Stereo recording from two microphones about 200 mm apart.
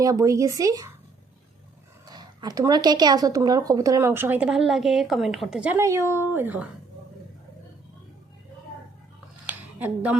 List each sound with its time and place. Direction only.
0.0 s speech: 15° right (ahead or behind)
2.0 s speech: 20° right (ahead or behind)
9.5 s a sound: 10° right (ahead or behind)